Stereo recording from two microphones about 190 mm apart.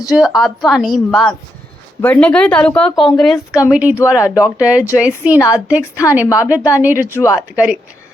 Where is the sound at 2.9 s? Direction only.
20° left (ahead or behind).